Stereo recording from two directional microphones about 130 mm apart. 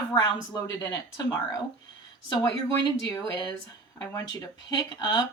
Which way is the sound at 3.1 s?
35° left (ahead or behind).